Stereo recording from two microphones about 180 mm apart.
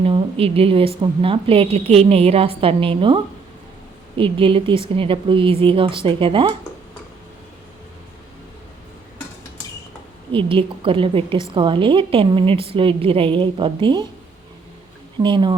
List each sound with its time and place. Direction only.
0.0 s a woman's voice: 30° right (ahead or behind)
4.2 s a woman's voice: 30° right (ahead or behind)
10.3 s a woman's voice: 30° right (ahead or behind)
15.2 s a woman's voice: 25° right (ahead or behind)